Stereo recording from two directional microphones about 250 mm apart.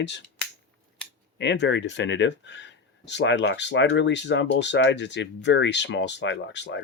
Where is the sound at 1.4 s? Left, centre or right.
Left.